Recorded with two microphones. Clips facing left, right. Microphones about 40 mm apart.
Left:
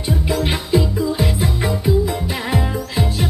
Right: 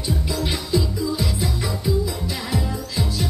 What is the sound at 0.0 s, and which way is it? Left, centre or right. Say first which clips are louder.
Music: left 5 dB; left.